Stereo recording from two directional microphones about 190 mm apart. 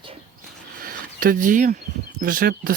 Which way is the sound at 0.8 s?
50° right (ahead or behind).